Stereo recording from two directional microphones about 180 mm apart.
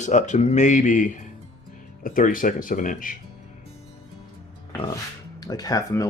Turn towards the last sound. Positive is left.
turn(degrees=20)  # may be behind; listen again after turning